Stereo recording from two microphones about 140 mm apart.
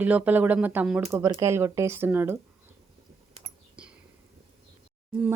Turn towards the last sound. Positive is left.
turn(degrees=-10)  # may be behind; listen again after turning